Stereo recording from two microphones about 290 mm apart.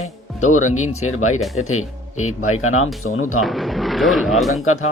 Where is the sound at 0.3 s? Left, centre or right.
Left.